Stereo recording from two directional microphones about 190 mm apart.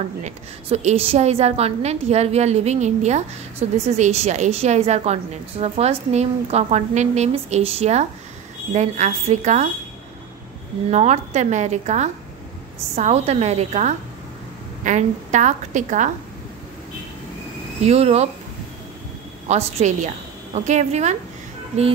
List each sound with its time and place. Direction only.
0.2 s a woman's voice: 35° right (ahead or behind)
10.9 s a woman's voice: 35° right (ahead or behind)
17.8 s a woman's voice: 35° right (ahead or behind)
19.4 s a woman's voice: 35° right (ahead or behind)